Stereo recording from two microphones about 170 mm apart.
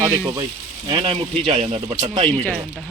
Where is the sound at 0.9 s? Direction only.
30° right (ahead or behind).